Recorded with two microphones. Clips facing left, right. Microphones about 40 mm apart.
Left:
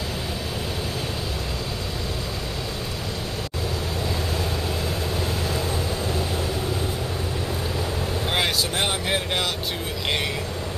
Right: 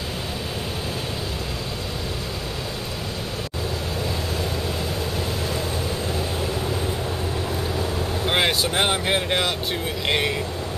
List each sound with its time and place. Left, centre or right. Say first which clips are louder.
8.3 s speech: right 3 dB; centre